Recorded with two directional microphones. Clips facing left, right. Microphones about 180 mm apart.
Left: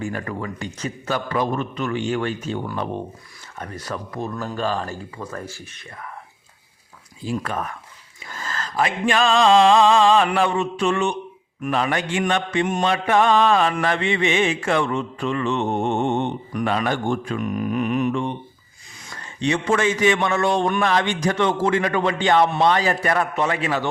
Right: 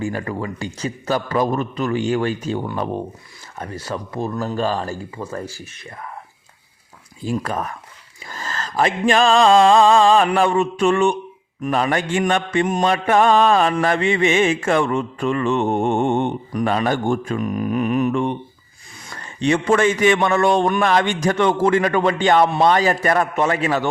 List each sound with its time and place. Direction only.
0.0 s a man's voice: 30° right (ahead or behind)
3.6 s a man's voice: 30° right (ahead or behind)
7.3 s a man's voice: 40° right (ahead or behind)
8.3 s mantra: 40° right (ahead or behind)
16.6 s a man's voice: 40° right (ahead or behind)
19.4 s mantra: 50° right (ahead or behind)